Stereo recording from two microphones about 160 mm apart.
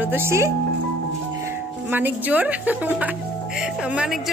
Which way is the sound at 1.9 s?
10° right (ahead or behind).